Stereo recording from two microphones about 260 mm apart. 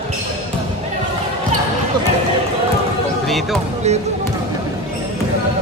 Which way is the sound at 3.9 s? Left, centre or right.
Right.